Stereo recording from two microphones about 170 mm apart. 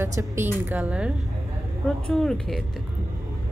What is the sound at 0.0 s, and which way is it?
A woman's voice, 15° right (ahead or behind).